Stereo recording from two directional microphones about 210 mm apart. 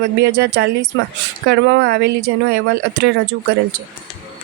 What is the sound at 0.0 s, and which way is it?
A woman's voice, 55° right (ahead or behind).